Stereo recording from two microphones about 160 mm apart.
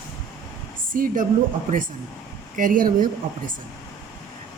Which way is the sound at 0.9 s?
60° right (ahead or behind).